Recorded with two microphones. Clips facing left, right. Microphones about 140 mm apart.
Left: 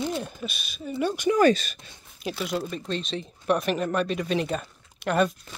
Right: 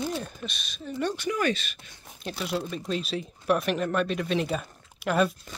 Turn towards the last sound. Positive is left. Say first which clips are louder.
# left 1 dB
turn(degrees=0)  # may be behind; listen again after turning